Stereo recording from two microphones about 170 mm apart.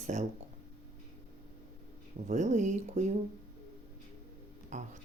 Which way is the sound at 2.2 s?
45° right (ahead or behind).